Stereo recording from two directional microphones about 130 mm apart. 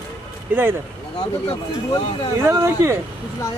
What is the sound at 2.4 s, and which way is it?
Speech, 20° right (ahead or behind).